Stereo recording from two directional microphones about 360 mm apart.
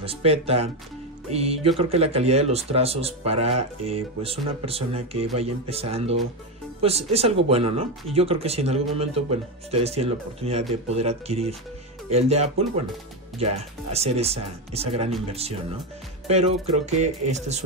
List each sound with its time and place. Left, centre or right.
0.0 s speech: centre